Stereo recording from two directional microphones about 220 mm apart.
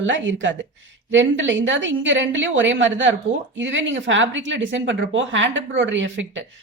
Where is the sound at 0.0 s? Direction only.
60° right (ahead or behind).